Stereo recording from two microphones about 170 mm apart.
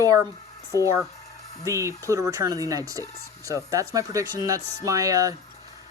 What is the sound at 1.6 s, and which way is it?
Speech, 15° right (ahead or behind).